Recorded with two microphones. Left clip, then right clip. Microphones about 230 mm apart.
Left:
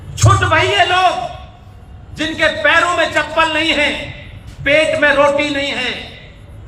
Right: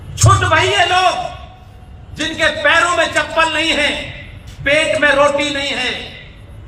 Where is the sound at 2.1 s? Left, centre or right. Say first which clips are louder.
Left 1 dB; left.